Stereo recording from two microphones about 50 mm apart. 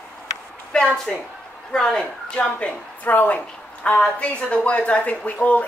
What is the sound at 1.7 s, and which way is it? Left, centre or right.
Speech, centre.